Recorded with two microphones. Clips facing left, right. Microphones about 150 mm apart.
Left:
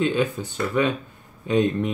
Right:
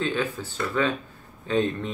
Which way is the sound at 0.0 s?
15° left (ahead or behind).